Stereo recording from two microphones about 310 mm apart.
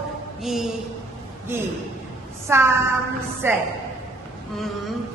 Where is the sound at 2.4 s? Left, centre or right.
Centre.